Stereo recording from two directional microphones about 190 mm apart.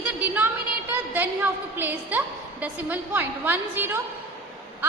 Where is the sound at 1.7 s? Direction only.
10° right (ahead or behind).